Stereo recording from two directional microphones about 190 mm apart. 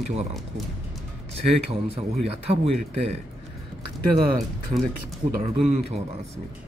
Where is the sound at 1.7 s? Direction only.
30° right (ahead or behind).